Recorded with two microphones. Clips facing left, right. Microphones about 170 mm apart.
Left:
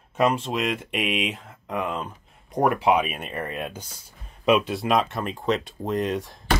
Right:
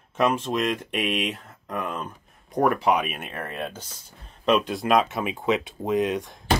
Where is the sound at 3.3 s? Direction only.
10° left (ahead or behind).